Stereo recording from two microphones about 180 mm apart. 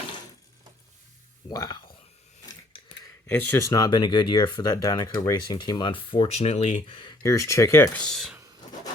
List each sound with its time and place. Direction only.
1.5 s speech: 20° left (ahead or behind)
3.2 s speech: 10° left (ahead or behind); by 6.8 s 40° left (ahead or behind)
6.8 s speech: 25° left (ahead or behind); by 8.4 s centre (ahead or behind)